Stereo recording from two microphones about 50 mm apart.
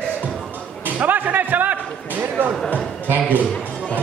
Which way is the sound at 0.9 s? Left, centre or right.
Right.